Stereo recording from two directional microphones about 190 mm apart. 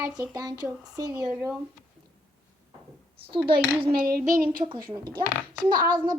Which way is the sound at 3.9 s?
50° right (ahead or behind).